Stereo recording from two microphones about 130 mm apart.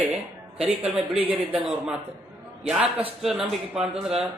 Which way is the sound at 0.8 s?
50° right (ahead or behind).